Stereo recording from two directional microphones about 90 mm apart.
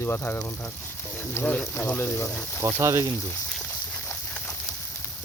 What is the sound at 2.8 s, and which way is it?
Speech, 30° right (ahead or behind).